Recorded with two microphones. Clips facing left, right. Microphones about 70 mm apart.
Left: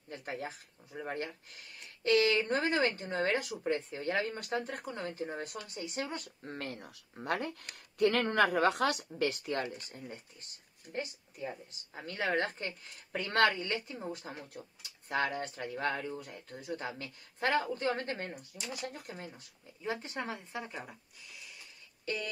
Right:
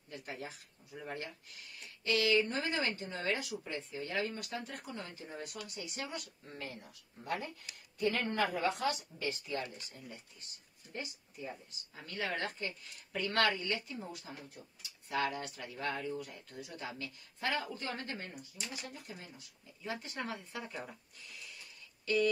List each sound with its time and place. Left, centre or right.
0.1 s speech: left
6.2 s speech: left
19.8 s speech: left
22.0 s speech: left